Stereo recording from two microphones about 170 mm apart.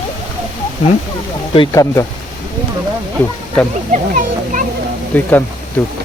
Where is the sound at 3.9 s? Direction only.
50° right (ahead or behind).